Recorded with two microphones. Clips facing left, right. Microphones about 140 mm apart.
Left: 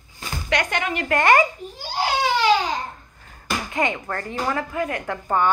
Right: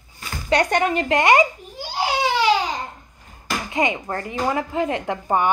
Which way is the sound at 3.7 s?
20° right (ahead or behind).